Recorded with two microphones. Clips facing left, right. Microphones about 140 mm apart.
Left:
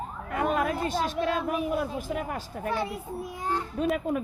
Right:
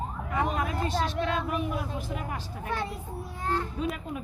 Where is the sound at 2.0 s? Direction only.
50° left (ahead or behind).